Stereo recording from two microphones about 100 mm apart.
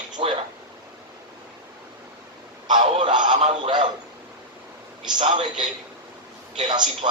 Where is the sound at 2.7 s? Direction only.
55° right (ahead or behind).